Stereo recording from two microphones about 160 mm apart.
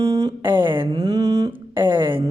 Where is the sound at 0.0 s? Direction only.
25° right (ahead or behind).